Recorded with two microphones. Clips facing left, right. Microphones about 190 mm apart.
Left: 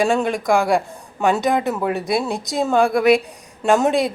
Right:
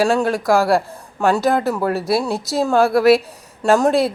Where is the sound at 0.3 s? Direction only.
5° right (ahead or behind).